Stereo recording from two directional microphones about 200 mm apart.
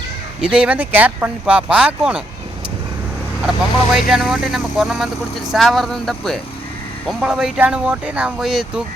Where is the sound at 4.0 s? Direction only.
Centre (ahead or behind).